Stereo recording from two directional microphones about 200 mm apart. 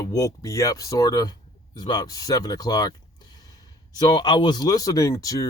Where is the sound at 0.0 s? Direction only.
20° left (ahead or behind).